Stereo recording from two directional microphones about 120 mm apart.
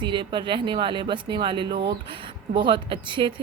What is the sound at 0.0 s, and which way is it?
Speech, 40° right (ahead or behind).